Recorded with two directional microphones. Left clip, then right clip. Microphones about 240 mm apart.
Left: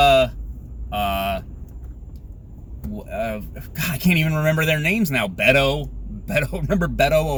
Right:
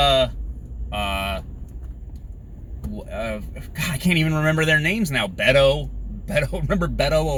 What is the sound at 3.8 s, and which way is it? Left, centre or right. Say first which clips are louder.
Speech: left 1 dB; left.